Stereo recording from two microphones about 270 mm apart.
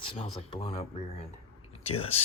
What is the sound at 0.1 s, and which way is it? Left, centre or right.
Speech, centre.